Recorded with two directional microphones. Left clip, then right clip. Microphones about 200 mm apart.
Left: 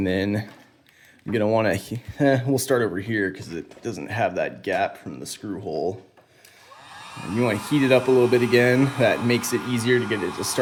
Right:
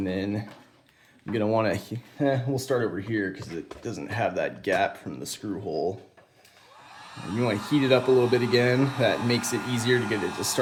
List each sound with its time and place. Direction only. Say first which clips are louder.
0.0 s speech: left 6 dB; 40° left (ahead or behind)
1.3 s speech: left 4 dB; 25° left (ahead or behind)
2.1 s speech: left 6 dB; 40° left (ahead or behind)
3.3 s speech: left 2 dB; 25° left (ahead or behind)
4.7 s speech: right 1 dB; 10° left (ahead or behind)
7.3 s speech: left 3 dB; 25° left (ahead or behind)